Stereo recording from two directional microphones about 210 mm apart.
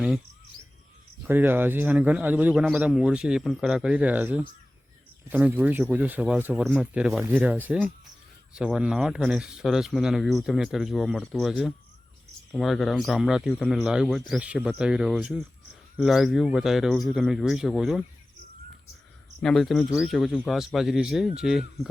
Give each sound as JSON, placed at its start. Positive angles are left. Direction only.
{"t": 1.2, "sound": "speech", "side_deg": -10}
{"t": 19.4, "sound": "speech", "side_deg": 0}